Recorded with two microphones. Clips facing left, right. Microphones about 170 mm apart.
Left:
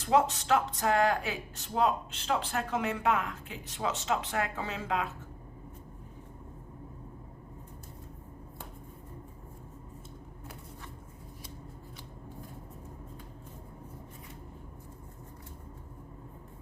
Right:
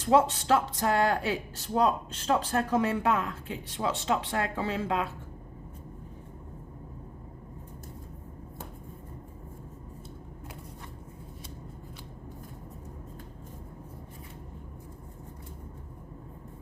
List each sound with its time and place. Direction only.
0.0 s speech: 30° right (ahead or behind)